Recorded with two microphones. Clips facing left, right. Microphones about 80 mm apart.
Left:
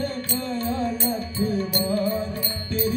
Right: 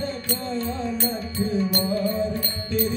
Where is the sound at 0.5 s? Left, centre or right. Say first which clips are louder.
Left 3 dB; left.